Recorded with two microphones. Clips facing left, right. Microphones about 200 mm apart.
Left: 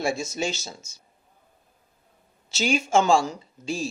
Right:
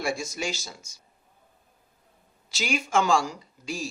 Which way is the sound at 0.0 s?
25° left (ahead or behind).